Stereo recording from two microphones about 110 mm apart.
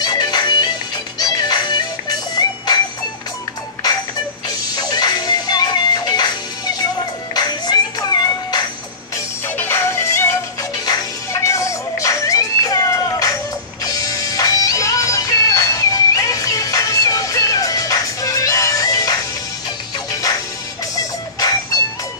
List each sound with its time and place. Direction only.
0.0 s music: 40° left (ahead or behind)
4.5 s music: 40° left (ahead or behind)
9.6 s music: 20° left (ahead or behind)